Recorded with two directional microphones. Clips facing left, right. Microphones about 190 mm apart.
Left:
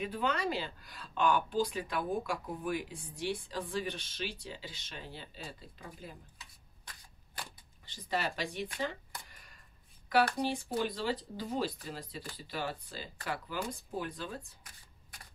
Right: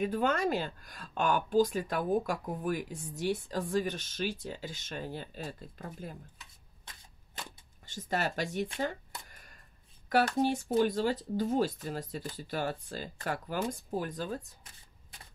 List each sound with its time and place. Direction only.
0.0 s speech: 45° right (ahead or behind)
7.8 s speech: 45° right (ahead or behind)
8.7 s a sound: 45° right (ahead or behind)
10.4 s speech: 45° right (ahead or behind)